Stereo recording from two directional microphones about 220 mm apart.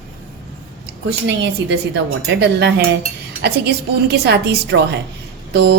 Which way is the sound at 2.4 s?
50° right (ahead or behind).